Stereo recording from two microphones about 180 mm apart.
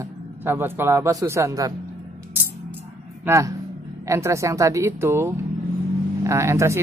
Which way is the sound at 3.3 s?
15° right (ahead or behind).